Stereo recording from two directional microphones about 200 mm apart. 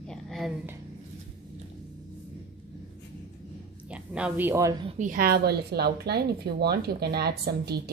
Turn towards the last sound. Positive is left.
turn(degrees=-50)  # may be behind; listen again after turning